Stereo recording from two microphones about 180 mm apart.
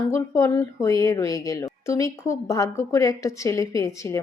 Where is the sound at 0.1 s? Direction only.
15° left (ahead or behind).